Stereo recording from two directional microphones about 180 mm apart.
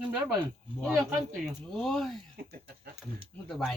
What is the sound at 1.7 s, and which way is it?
Speech, centre (ahead or behind).